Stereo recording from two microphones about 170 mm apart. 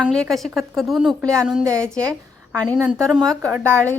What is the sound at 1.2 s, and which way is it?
Speech, 20° right (ahead or behind).